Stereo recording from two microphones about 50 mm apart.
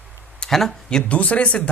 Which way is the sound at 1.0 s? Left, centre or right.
Left.